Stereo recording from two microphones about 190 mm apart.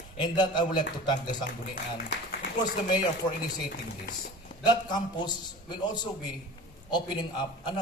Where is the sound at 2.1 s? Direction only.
55° left (ahead or behind).